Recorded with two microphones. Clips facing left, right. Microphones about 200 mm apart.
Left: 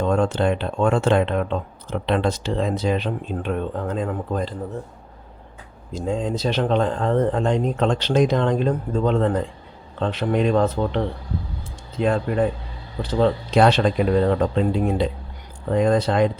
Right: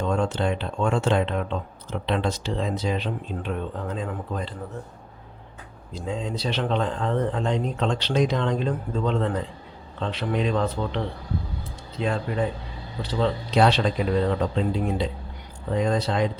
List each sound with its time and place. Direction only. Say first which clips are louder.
0.0 s speech: left 5 dB; 55° left (ahead or behind)
5.9 s speech: left 6 dB; 50° left (ahead or behind)